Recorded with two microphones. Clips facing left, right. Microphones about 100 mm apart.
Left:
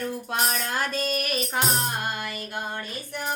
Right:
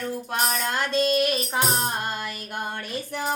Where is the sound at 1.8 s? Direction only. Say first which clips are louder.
Right 1 dB; 30° right (ahead or behind).